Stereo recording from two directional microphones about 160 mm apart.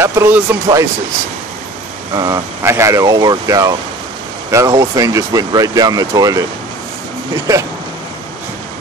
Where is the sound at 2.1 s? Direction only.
20° right (ahead or behind).